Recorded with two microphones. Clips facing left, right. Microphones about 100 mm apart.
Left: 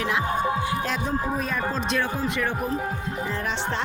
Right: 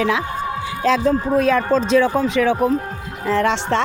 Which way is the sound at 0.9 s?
90° right.